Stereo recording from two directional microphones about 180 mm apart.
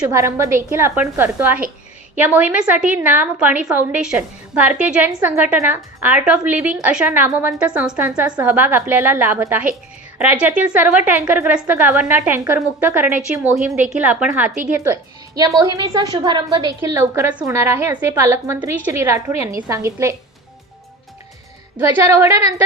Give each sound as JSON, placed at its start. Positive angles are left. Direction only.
{"t": 0.0, "sound": "a woman's voice", "side_deg": -15}
{"t": 15.4, "sound": "a woman's voice", "side_deg": -20}
{"t": 21.8, "sound": "a woman's voice", "side_deg": -15}